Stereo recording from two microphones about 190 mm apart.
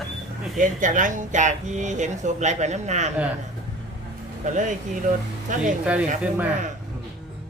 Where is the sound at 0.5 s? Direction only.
40° right (ahead or behind).